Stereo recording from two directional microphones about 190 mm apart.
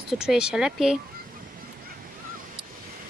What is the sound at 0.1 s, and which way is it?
Speech, 5° right (ahead or behind).